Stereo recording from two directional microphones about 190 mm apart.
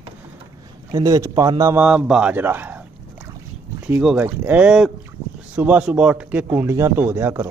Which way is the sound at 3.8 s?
5° right (ahead or behind).